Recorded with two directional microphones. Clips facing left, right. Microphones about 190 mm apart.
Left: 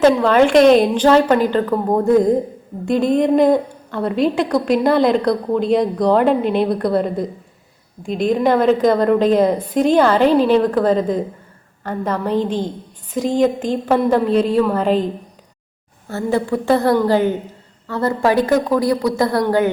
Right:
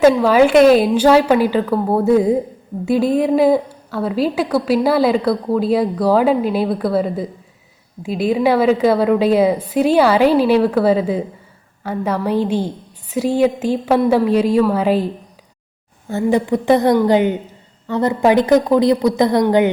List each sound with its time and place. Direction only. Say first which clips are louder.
0.0 s a woman's voice: right 1 dB; 5° right (ahead or behind)